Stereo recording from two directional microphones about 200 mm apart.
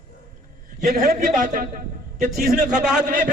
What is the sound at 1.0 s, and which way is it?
A man's voice, 45° right (ahead or behind).